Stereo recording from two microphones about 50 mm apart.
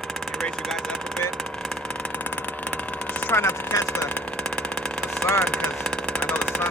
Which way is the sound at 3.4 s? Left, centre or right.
Left.